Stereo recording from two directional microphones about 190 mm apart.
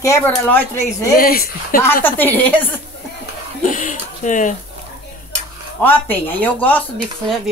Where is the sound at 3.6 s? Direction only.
45° left (ahead or behind).